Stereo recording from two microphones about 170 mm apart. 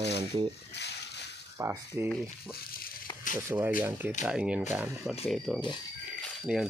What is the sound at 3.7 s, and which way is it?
Speech, 10° right (ahead or behind).